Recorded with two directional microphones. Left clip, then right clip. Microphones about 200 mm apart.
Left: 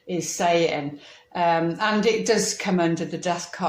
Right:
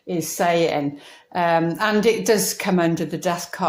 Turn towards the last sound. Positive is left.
turn(degrees=-40)  # may be behind; listen again after turning